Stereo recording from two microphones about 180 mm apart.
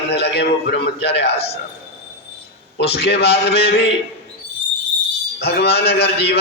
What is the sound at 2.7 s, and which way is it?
A man's voice, 70° left (ahead or behind).